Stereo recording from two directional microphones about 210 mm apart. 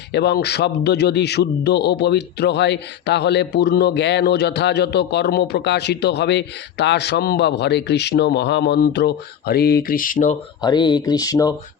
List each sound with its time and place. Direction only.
0.1 s a man's voice: 50° left (ahead or behind)
10.6 s speech: 20° left (ahead or behind)